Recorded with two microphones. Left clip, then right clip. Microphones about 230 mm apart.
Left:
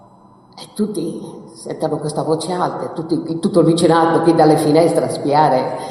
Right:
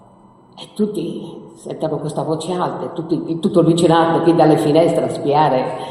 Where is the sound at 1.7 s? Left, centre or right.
Left.